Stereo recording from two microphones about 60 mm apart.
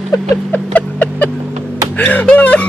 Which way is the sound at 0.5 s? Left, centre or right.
Left.